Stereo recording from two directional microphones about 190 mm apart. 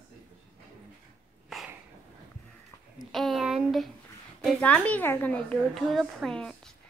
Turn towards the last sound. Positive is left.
turn(degrees=5)  # may be behind; listen again after turning